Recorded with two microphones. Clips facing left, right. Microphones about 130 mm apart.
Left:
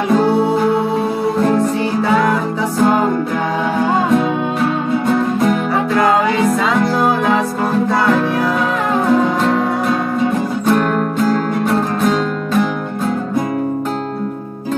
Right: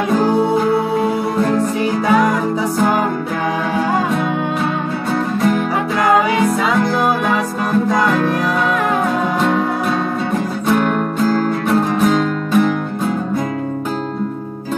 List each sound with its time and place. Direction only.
10.7 s music: centre (ahead or behind)